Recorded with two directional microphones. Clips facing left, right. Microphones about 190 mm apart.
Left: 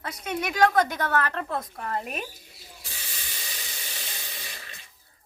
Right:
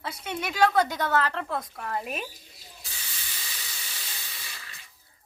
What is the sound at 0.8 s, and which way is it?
Speech, 15° right (ahead or behind).